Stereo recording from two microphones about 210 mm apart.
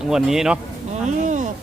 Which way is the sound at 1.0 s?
35° right (ahead or behind).